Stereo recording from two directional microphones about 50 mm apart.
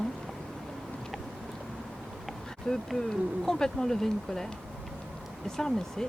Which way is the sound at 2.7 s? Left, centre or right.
Centre.